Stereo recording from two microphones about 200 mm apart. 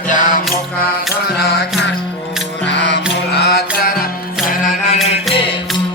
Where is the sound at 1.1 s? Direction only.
55° left (ahead or behind).